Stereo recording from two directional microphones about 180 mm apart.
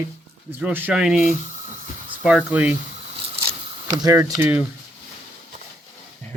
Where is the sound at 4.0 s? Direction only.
20° right (ahead or behind).